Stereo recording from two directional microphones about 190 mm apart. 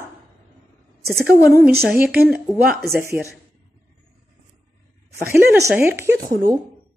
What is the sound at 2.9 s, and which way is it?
Speech, 15° right (ahead or behind).